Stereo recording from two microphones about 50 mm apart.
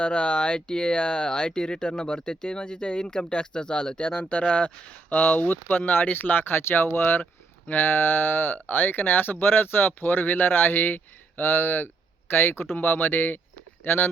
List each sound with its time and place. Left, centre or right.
0.0 s speech: centre; by 14.1 s left